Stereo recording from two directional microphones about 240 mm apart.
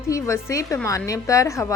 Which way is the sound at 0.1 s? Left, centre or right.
Centre.